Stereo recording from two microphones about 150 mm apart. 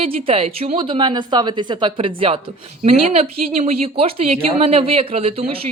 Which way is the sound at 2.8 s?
50° right (ahead or behind).